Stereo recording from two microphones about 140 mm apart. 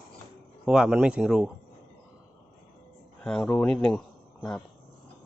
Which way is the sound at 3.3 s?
5° left (ahead or behind).